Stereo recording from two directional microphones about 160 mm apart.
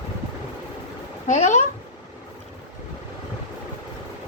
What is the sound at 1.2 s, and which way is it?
Speech, 45° left (ahead or behind).